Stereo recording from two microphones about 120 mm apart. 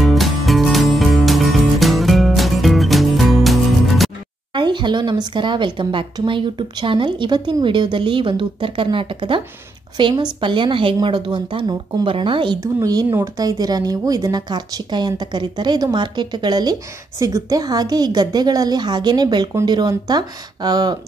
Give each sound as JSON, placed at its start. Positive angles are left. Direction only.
{"t": 0.0, "sound": "music", "side_deg": 0}
{"t": 4.6, "sound": "a woman's voice", "side_deg": -40}
{"t": 12.5, "sound": "a woman's voice", "side_deg": -30}